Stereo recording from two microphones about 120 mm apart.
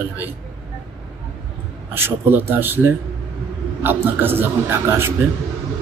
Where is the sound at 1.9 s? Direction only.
15° right (ahead or behind).